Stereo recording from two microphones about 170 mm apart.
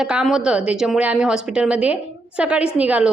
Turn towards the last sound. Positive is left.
turn(degrees=-10)  # may be behind; listen again after turning